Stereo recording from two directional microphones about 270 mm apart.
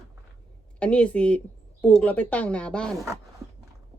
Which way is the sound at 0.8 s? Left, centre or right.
Centre.